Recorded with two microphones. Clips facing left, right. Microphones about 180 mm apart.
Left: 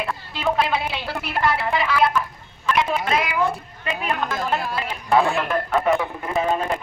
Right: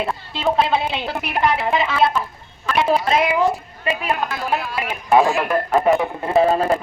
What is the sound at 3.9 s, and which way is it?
Speech, 5° right (ahead or behind).